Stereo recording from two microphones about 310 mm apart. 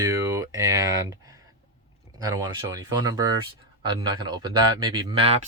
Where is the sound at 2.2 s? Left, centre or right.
Centre.